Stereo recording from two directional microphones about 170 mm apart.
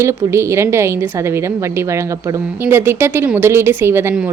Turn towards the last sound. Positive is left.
turn(degrees=-10)  # may be behind; listen again after turning